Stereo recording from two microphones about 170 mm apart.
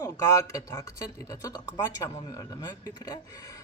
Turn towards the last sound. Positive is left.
turn(degrees=25)  # may be behind; listen again after turning